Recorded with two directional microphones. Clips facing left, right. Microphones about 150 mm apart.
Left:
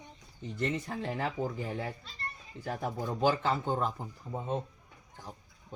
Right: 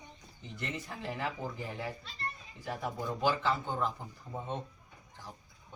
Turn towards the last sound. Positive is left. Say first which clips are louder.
# left 4 dB
turn(degrees=10)  # may be behind; listen again after turning